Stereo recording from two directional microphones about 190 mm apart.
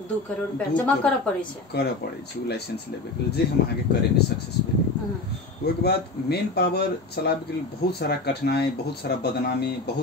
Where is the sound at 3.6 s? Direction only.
60° left (ahead or behind).